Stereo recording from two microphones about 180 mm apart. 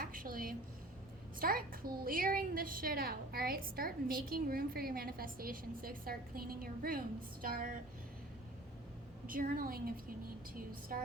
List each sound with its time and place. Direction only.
0.0 s a sound: 50° right (ahead or behind)
1.4 s a child's voice: 55° right (ahead or behind)
9.2 s a woman's voice: 50° right (ahead or behind)